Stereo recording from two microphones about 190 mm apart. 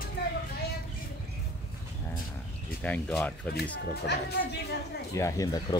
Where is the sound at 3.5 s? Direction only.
55° left (ahead or behind).